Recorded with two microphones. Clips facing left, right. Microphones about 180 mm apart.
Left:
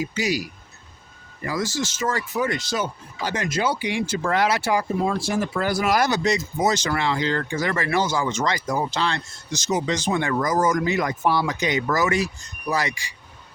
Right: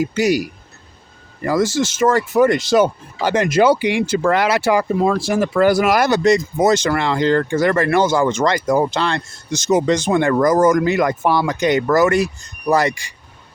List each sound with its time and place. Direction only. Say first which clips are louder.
1.5 s speech: right 9 dB; 65° right (ahead or behind)
11.2 s speech: right 5 dB; 60° right (ahead or behind)